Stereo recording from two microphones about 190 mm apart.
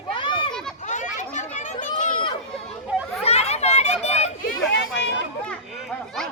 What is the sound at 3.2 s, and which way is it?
Children playing, 35° left (ahead or behind).